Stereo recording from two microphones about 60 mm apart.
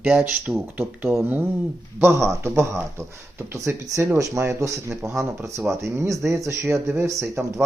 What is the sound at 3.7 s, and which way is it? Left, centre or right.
Speech, right.